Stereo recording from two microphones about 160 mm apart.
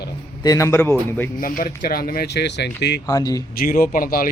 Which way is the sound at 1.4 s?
60° left (ahead or behind).